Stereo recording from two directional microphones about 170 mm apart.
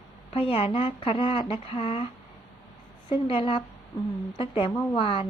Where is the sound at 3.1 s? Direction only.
35° left (ahead or behind).